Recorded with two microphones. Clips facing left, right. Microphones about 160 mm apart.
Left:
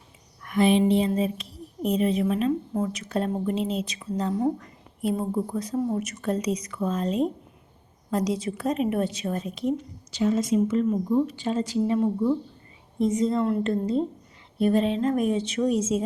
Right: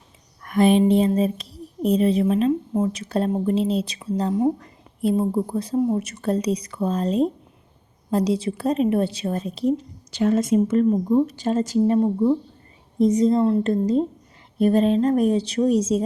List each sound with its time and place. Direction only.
0.4 s a woman's voice: 45° right (ahead or behind)
10.1 s speech: 55° right (ahead or behind)
10.8 s speech: 40° right (ahead or behind)
11.9 s a woman's voice: 30° right (ahead or behind)